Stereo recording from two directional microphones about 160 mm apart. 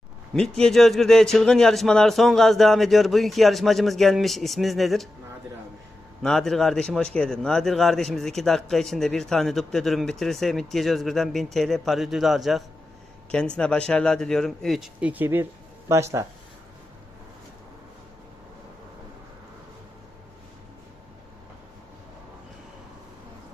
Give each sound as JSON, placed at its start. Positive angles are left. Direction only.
{"t": 0.3, "sound": "a man's voice", "side_deg": 5}
{"t": 6.2, "sound": "a man's voice", "side_deg": 0}